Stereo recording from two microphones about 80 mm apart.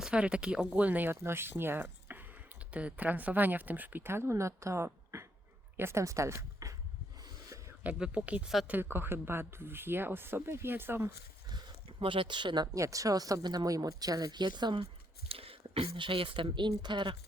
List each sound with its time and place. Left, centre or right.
0.0 s speech: centre; by 4.9 s right
5.1 s dog: right
5.7 s speech: right
7.9 s speech: centre; by 11.1 s right
11.4 s a sound: right
12.7 s speech: right
16.0 s speech: right